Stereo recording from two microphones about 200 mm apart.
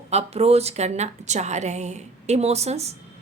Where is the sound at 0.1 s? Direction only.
30° right (ahead or behind).